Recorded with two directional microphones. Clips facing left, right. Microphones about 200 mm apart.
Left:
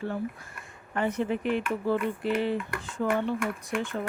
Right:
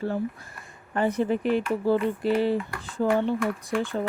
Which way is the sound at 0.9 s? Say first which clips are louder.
Right 4 dB; 35° right (ahead or behind).